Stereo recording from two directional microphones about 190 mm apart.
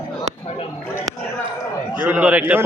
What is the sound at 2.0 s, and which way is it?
Speech, 10° right (ahead or behind).